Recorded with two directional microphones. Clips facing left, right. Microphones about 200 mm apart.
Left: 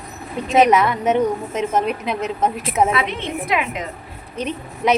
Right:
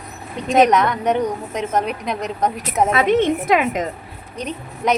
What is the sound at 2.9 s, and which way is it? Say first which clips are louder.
Speech: right 7 dB; 45° right (ahead or behind).